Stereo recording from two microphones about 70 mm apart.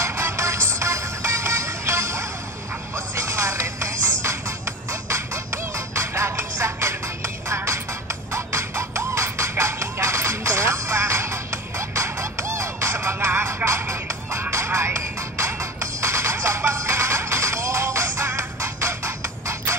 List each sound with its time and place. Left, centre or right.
0.0 s music: right